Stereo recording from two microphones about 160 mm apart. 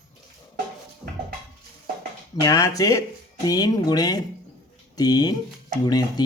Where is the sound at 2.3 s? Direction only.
20° left (ahead or behind).